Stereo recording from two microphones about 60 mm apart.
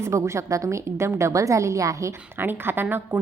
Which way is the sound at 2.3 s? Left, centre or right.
Right.